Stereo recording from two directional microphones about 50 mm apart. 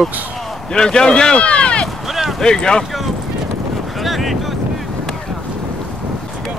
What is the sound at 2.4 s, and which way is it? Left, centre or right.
Speech, centre.